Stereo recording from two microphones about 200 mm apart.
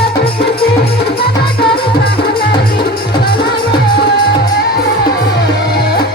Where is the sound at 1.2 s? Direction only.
50° left (ahead or behind).